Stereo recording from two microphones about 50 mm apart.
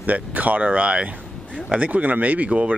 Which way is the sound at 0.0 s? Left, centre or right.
Right.